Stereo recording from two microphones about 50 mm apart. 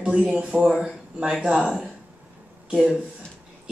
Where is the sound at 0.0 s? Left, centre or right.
Right.